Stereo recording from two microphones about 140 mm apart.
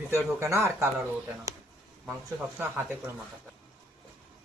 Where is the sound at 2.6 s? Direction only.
15° right (ahead or behind).